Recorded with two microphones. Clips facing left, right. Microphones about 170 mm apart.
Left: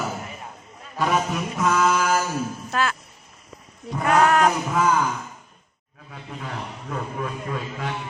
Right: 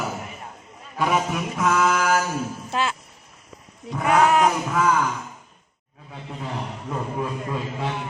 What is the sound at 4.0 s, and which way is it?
Speech, 10° right (ahead or behind).